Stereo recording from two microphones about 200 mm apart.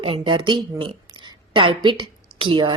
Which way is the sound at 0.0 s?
25° right (ahead or behind).